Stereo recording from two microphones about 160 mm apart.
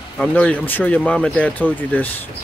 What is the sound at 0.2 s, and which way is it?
Speech, 10° left (ahead or behind).